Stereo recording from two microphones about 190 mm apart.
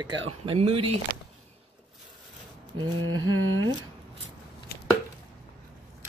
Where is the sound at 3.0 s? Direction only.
90° right.